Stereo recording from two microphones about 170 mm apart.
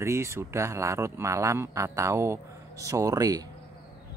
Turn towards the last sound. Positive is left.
turn(degrees=-20)  # may be behind; listen again after turning